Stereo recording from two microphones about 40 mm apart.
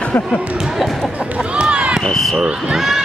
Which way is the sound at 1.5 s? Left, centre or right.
Right.